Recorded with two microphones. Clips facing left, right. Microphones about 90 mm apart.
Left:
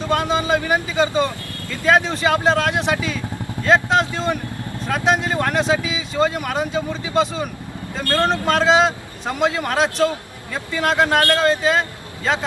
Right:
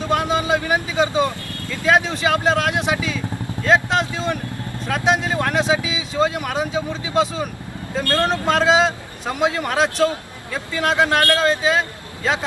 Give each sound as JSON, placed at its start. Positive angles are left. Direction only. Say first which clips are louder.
{"t": 0.1, "sound": "speech", "louder": "even", "side_deg": 0}
{"t": 8.0, "sound": "speech", "louder": "left 1 dB", "side_deg": 25}
{"t": 8.3, "sound": "speech", "louder": "left 1 dB", "side_deg": 0}